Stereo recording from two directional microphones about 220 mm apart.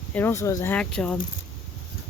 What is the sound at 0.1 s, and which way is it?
Speech, 10° left (ahead or behind).